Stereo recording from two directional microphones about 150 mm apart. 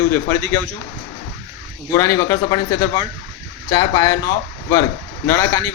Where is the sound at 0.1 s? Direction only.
15° left (ahead or behind).